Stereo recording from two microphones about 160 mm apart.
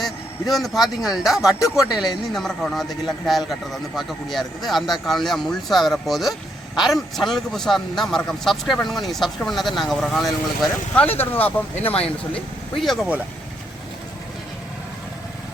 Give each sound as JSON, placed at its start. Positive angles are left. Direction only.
{"t": 0.0, "sound": "speech", "side_deg": 0}